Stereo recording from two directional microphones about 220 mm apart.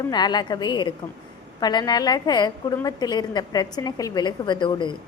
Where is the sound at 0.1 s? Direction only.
20° left (ahead or behind).